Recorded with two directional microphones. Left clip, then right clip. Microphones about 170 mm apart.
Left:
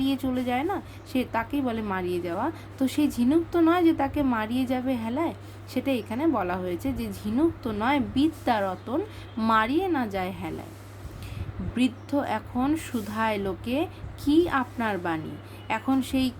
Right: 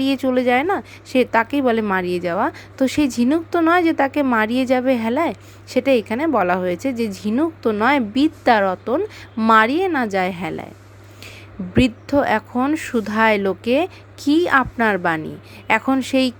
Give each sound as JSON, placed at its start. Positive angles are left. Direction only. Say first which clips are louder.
{"t": 0.0, "sound": "speech", "louder": "right 10 dB", "side_deg": -50}
{"t": 11.7, "sound": "speech", "louder": "right 9 dB", "side_deg": -50}